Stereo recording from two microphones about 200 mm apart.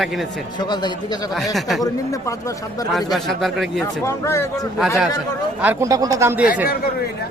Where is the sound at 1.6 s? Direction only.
Centre (ahead or behind).